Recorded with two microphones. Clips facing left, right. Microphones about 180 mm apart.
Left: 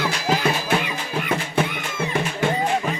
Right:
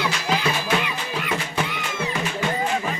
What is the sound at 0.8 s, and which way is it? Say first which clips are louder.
Music: left 2 dB; 50° left (ahead or behind).